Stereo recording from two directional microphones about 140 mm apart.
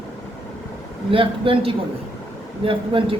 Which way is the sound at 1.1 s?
40° right (ahead or behind).